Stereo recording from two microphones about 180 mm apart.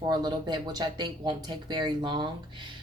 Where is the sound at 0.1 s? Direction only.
25° right (ahead or behind).